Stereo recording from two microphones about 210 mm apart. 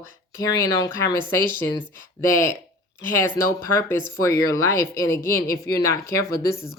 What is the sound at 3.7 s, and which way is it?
Speech, 10° left (ahead or behind).